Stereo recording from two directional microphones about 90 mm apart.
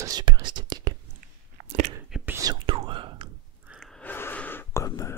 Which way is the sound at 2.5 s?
80° right.